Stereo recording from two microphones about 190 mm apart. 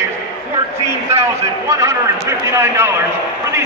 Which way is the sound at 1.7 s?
15° right (ahead or behind).